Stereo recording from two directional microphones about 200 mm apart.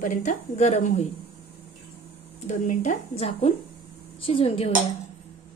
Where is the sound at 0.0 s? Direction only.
40° left (ahead or behind).